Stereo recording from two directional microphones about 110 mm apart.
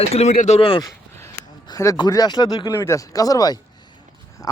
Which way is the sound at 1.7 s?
30° left (ahead or behind).